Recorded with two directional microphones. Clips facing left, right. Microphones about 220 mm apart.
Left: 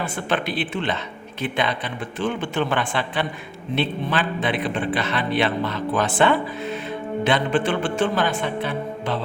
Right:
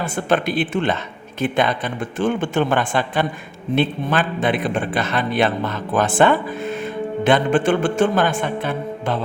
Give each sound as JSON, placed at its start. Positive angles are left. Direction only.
{"t": 0.0, "sound": "a man's voice", "side_deg": -45}